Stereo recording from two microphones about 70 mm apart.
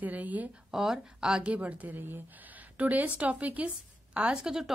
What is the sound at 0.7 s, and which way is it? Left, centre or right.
A woman's voice, centre.